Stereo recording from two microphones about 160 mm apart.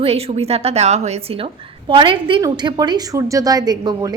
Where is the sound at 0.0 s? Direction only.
40° right (ahead or behind).